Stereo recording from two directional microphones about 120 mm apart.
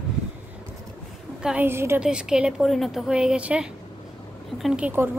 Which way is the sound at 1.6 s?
20° right (ahead or behind).